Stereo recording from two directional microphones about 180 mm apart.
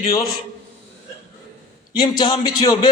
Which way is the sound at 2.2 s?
25° left (ahead or behind).